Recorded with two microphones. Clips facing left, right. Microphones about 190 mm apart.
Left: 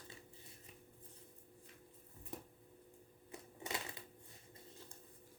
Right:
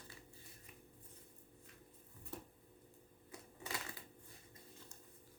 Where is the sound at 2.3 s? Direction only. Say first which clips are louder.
Left 1 dB; 15° left (ahead or behind).